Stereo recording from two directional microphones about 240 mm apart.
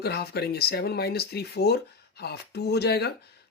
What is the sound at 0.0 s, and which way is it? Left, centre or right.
Speech, left.